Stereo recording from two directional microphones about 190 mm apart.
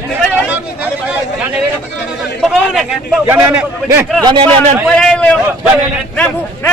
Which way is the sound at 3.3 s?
10° right (ahead or behind).